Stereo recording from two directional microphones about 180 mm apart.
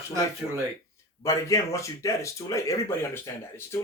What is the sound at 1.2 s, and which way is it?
Speech, 15° left (ahead or behind).